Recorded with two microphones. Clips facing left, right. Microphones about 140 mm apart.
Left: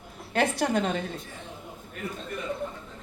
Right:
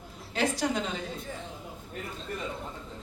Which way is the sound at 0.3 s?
60° left (ahead or behind).